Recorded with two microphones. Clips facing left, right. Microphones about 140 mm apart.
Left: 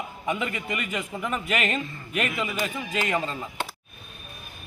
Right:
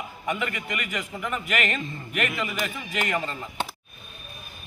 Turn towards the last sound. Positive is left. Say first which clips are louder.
# left 1 dB
turn(degrees=15)  # may be behind; listen again after turning